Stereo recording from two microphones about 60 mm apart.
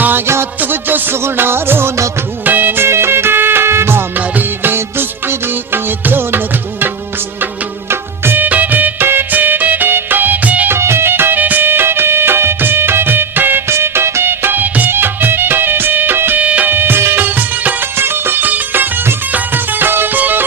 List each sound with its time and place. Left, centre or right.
0.6 s music: right
7.9 s music of bollywood: right
10.7 s music: right
16.4 s music: right